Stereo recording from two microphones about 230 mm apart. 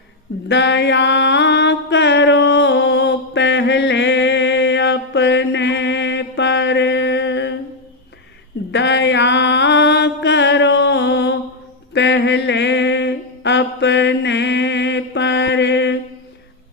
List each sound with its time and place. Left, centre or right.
0.4 s mantra: left
8.7 s mantra: left
11.9 s a sound: left